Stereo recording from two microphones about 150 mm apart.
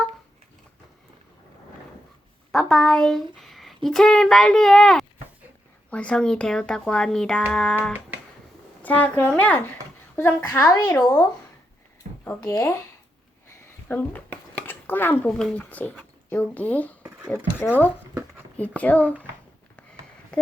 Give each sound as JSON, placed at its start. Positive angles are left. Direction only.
{"t": 2.5, "sound": "a woman's voice", "side_deg": 5}
{"t": 12.2, "sound": "a woman's voice", "side_deg": 20}
{"t": 13.8, "sound": "speech", "side_deg": 10}
{"t": 18.8, "sound": "speech", "side_deg": 10}
{"t": 20.3, "sound": "a sound", "side_deg": 5}